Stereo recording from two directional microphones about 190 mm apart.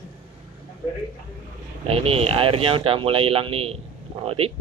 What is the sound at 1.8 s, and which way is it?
Speech, 30° right (ahead or behind).